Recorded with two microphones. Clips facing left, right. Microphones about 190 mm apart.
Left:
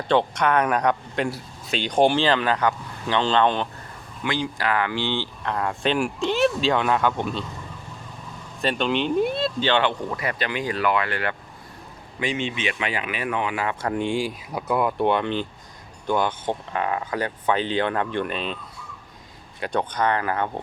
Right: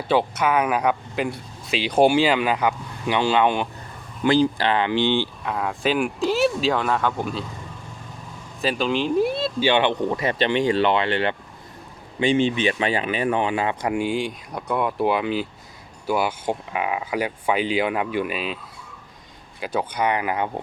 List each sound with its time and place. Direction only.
0.0 s speech: 5° right (ahead or behind)
4.2 s speech: 35° right (ahead or behind); by 7.4 s centre (ahead or behind)
8.6 s speech: centre (ahead or behind); by 13.9 s 25° right (ahead or behind)
13.9 s speech: 5° right (ahead or behind)